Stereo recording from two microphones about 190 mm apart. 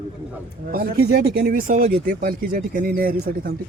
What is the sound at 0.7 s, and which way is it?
Speech, 50° right (ahead or behind).